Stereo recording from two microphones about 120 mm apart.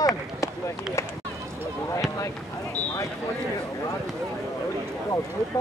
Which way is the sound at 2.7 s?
10° left (ahead or behind).